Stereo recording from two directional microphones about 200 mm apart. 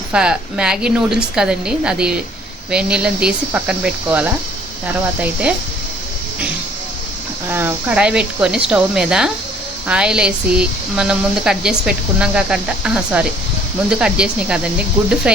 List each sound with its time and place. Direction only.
0.1 s speech: 5° right (ahead or behind)
7.5 s speech: 10° right (ahead or behind)